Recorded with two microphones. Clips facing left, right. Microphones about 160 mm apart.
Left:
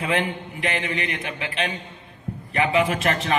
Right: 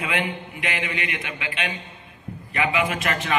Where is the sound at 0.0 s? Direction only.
35° left (ahead or behind).